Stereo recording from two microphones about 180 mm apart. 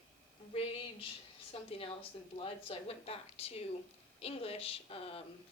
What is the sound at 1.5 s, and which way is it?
Speech, 30° left (ahead or behind).